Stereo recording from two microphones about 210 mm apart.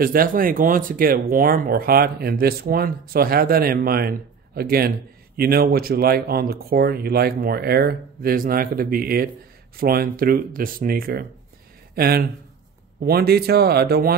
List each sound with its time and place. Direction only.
0.0 s speech: 45° right (ahead or behind)